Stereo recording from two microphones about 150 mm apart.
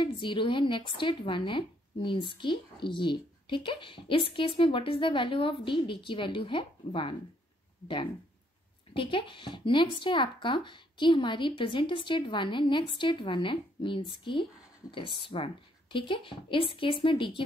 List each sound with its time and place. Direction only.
0.0 s speech: 35° left (ahead or behind)
8.9 s speech: 35° left (ahead or behind)